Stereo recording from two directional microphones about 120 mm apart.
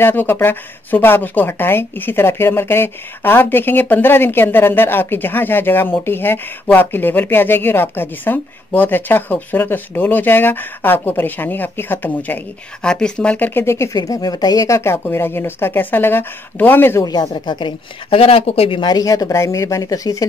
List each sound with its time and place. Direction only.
0.0 s speech: 15° left (ahead or behind)
17.0 s speech: 35° left (ahead or behind)